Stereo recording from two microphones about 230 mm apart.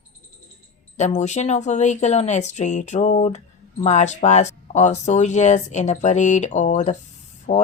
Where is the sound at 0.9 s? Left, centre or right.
Left.